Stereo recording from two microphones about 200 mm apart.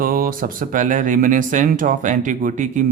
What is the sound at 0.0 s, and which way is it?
Speech, 45° right (ahead or behind).